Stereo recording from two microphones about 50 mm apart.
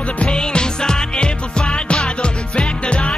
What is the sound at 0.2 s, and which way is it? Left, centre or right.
Music, centre.